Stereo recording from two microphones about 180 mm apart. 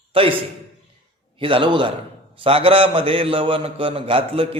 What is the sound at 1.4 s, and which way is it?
A man's voice, 30° right (ahead or behind).